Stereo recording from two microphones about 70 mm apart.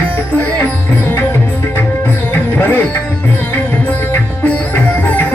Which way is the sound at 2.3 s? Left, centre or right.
Left.